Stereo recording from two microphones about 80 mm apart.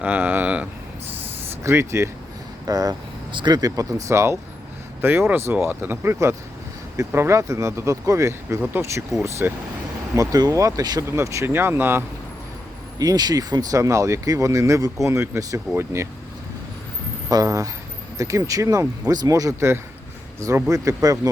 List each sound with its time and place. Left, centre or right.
0.0 s a sound: right
1.6 s speech: right
2.6 s speech: right
3.3 s speech: right
3.6 s speech: right
9.4 s speech: right
10.2 s speech: right
11.0 s speech: right
13.0 s speech: right
17.2 s speech: right
19.5 s speech: right
20.7 s speech: right